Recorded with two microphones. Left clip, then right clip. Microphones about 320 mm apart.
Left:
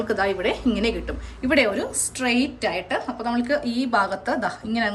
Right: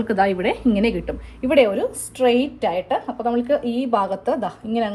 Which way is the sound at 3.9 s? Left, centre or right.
Centre.